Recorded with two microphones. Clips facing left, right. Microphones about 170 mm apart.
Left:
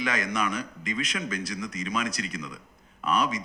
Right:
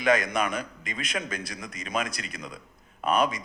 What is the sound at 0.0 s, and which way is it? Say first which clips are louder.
A woman's voice: right 4 dB; 55° right (ahead or behind).